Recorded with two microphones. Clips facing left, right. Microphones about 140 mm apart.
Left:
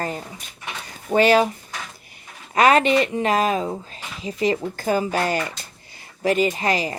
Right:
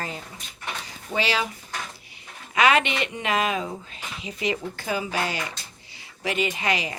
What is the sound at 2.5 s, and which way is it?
A woman's voice, 40° left (ahead or behind).